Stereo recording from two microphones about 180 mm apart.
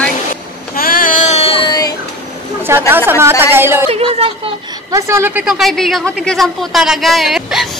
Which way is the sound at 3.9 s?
30° right (ahead or behind).